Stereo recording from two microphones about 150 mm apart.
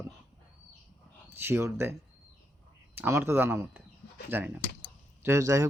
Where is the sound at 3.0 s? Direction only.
15° right (ahead or behind).